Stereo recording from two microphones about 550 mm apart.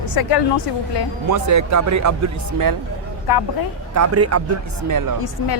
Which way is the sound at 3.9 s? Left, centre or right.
Right.